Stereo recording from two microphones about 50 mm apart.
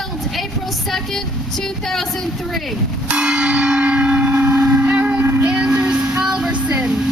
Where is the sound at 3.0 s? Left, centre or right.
Centre.